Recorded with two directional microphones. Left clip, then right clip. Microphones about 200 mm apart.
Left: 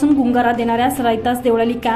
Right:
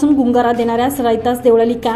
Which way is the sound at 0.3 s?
5° left (ahead or behind).